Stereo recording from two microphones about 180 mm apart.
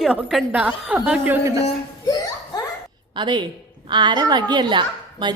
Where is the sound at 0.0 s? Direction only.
5° right (ahead or behind).